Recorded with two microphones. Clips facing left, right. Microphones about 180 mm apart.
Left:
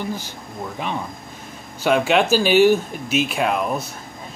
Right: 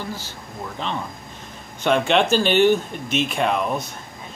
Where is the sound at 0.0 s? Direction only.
15° left (ahead or behind).